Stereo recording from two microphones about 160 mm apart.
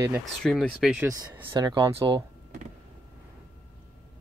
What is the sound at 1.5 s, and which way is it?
Speech, 25° right (ahead or behind).